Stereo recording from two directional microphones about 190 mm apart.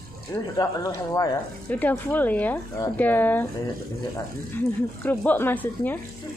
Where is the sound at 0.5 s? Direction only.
15° left (ahead or behind).